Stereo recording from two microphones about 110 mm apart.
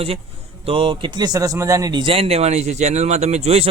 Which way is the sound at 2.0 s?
60° right (ahead or behind).